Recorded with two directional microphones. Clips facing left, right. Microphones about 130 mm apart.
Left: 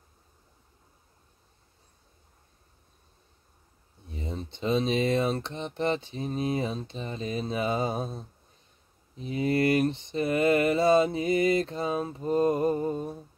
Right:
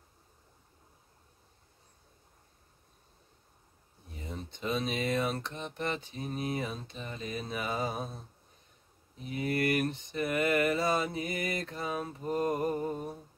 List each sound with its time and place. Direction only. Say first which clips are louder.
4.1 s speech: left 6 dB; 25° left (ahead or behind)